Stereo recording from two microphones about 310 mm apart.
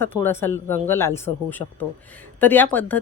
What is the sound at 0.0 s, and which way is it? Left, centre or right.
A woman's voice, centre.